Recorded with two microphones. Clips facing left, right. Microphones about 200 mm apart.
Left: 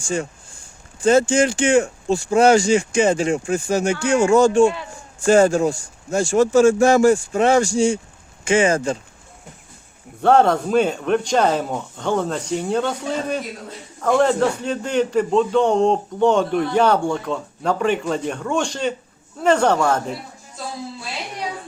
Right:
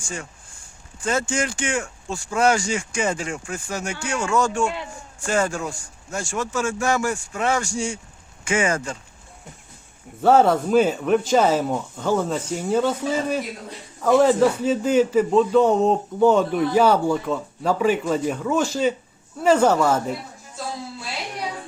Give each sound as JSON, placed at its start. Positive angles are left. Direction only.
{"t": 1.3, "sound": "speech", "side_deg": 30}
{"t": 10.2, "sound": "a man's voice", "side_deg": -5}